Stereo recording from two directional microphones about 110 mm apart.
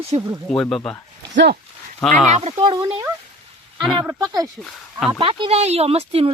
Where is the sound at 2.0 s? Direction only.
5° left (ahead or behind).